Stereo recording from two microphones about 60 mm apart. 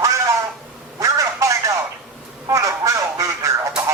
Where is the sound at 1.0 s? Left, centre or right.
Right.